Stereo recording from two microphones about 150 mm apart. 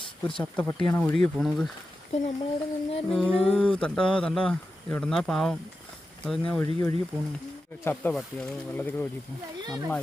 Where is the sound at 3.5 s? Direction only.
5° left (ahead or behind).